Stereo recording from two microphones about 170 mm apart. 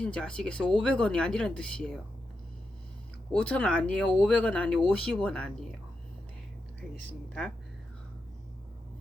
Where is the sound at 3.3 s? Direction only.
5° left (ahead or behind).